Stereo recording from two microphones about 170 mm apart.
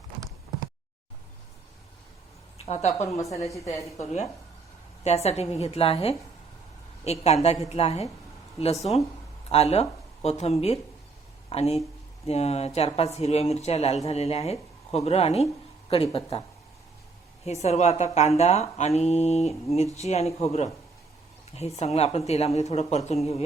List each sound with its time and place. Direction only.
2.6 s a woman's voice: 40° left (ahead or behind)
3.2 s a woman's voice: 20° left (ahead or behind)
3.9 s speech: 40° left (ahead or behind)
17.4 s speech: 40° left (ahead or behind)
21.8 s speech: 40° left (ahead or behind)